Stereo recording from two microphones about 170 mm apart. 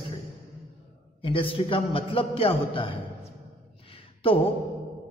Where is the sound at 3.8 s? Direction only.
30° left (ahead or behind).